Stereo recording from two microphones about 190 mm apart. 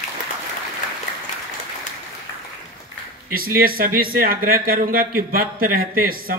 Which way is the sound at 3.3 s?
50° right (ahead or behind).